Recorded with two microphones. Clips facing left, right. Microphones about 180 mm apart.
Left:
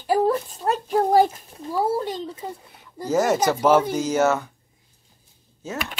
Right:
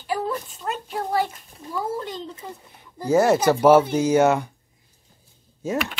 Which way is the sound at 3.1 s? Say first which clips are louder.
Right 3 dB; 10° right (ahead or behind).